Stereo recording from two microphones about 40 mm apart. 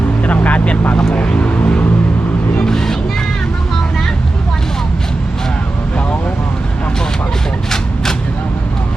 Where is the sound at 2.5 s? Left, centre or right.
Centre.